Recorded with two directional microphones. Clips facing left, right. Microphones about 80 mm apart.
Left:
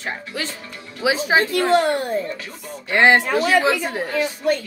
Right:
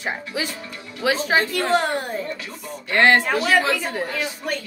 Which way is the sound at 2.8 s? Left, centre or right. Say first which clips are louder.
Left 1 dB; centre.